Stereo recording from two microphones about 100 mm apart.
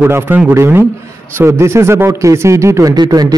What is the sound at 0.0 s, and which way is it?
A man's voice, 20° right (ahead or behind).